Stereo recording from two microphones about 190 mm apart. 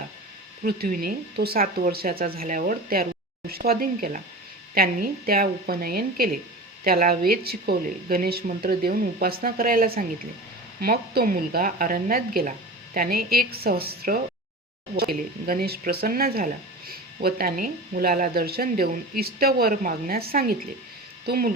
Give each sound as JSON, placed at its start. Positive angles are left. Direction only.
{"t": 0.6, "sound": "speech", "side_deg": -50}